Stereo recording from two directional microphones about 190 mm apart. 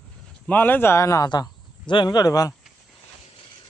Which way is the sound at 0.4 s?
10° left (ahead or behind).